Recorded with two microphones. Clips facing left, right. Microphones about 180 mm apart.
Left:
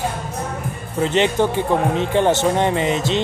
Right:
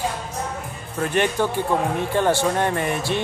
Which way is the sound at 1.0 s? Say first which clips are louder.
Left 4 dB; 20° left (ahead or behind).